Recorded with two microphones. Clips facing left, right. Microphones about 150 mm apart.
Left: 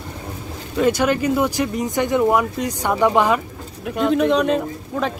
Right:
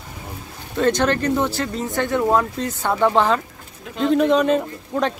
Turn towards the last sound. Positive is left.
turn(degrees=0)  # may be behind; listen again after turning